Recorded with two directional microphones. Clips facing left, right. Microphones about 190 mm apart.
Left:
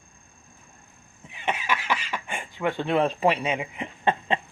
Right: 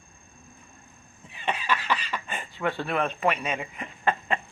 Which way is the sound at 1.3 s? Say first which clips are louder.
Even; 10° left (ahead or behind).